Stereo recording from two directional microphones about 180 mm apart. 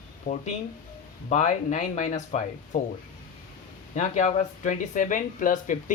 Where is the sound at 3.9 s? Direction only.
40° left (ahead or behind).